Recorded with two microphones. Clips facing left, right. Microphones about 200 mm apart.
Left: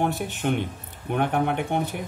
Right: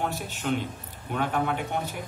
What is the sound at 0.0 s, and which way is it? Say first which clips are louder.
A man's voice: left 5 dB; 55° left (ahead or behind).